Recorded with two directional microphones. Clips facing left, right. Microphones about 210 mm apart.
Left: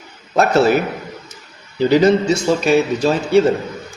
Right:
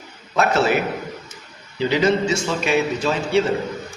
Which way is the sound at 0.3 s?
40° left (ahead or behind).